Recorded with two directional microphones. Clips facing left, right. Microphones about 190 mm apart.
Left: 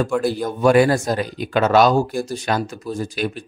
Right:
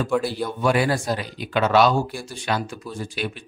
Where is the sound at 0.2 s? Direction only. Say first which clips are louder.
Left 6 dB; 45° left (ahead or behind).